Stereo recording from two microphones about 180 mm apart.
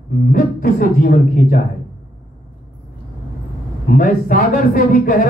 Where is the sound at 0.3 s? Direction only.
50° left (ahead or behind).